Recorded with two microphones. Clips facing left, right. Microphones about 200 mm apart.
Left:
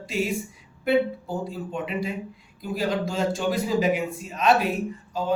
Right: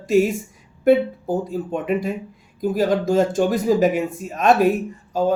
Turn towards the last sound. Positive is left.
turn(degrees=-45)  # may be behind; listen again after turning